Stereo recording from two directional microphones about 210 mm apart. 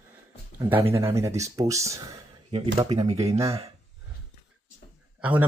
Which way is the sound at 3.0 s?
30° right (ahead or behind).